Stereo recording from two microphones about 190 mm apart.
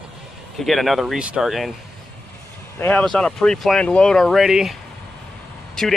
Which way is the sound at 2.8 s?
5° left (ahead or behind).